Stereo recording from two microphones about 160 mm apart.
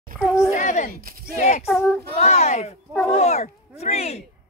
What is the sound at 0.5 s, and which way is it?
Speech, 50° left (ahead or behind).